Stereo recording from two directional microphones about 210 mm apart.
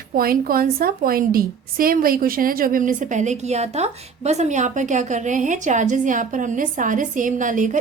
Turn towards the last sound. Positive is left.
turn(degrees=-35)  # may be behind; listen again after turning